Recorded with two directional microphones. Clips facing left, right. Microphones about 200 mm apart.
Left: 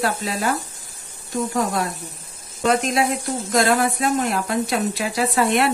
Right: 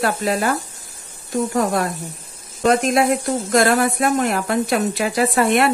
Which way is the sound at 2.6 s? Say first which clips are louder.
Right 3 dB; 50° right (ahead or behind).